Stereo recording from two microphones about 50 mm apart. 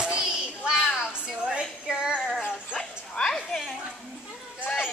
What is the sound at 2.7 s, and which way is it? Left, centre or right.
Dog, centre.